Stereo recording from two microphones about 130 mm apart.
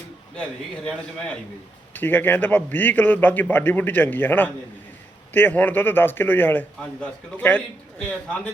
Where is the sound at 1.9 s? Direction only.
15° left (ahead or behind).